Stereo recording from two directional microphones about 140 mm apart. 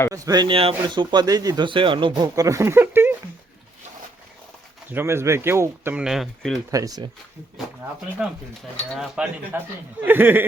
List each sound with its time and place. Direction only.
0.1 s speech: 30° right (ahead or behind)
0.5 s speech: 40° right (ahead or behind); by 3.2 s 15° right (ahead or behind)
4.9 s a man's voice: 15° right (ahead or behind)
6.0 s speech: centre (ahead or behind)
6.7 s speech: 25° right (ahead or behind)
9.0 s a man's voice: 10° right (ahead or behind)